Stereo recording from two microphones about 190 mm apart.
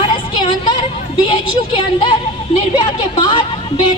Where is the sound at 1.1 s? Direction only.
25° left (ahead or behind).